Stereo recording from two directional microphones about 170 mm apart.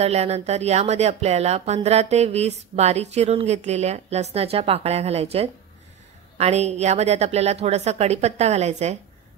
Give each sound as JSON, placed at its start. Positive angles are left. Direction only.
{"t": 0.0, "sound": "speech", "side_deg": -40}